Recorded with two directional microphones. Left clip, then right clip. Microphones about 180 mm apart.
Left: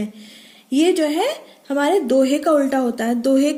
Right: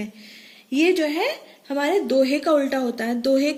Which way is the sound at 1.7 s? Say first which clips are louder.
Left 4 dB; 75° left (ahead or behind).